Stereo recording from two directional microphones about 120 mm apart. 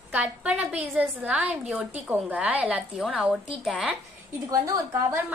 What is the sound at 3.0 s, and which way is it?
Speech, centre (ahead or behind).